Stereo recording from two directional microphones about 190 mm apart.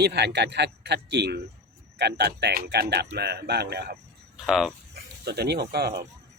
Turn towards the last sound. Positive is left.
turn(degrees=-55)  # may be behind; listen again after turning